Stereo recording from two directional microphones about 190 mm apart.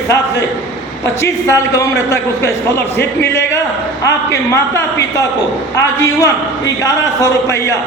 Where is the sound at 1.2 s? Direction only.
15° left (ahead or behind).